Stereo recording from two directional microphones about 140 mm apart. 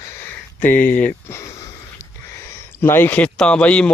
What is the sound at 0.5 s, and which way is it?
Speech, 15° left (ahead or behind).